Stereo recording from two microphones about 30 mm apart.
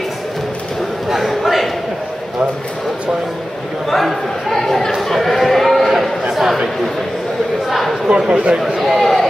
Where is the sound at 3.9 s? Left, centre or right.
Centre.